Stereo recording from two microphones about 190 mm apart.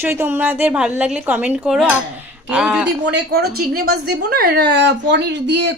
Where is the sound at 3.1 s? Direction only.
60° right (ahead or behind).